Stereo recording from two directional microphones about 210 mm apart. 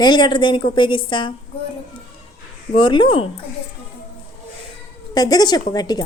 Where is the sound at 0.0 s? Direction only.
20° left (ahead or behind).